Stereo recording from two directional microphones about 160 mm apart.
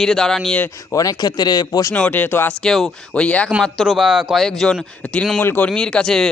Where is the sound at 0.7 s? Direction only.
20° left (ahead or behind).